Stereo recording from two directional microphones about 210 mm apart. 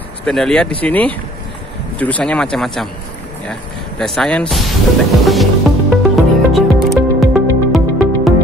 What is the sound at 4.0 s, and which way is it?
Speech, 5° left (ahead or behind).